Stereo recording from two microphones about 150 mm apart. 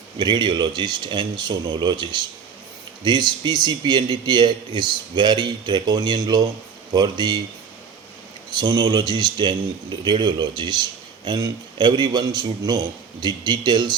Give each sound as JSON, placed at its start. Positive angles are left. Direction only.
{"t": 0.2, "sound": "a man's voice", "side_deg": -30}
{"t": 8.5, "sound": "a man's voice", "side_deg": -25}